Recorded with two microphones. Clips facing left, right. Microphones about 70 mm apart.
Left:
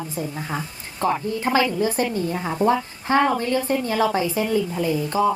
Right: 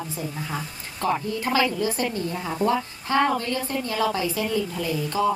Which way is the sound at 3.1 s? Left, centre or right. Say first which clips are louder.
Left 3 dB; left.